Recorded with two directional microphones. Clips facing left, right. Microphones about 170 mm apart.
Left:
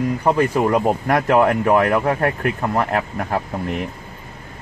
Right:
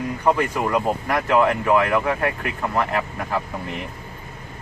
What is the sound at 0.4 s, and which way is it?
Speech, 45° left (ahead or behind).